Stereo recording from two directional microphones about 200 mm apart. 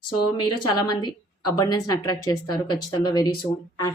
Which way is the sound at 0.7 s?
20° left (ahead or behind).